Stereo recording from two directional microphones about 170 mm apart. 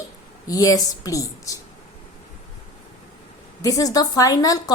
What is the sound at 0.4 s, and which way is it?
A woman's voice, 20° left (ahead or behind).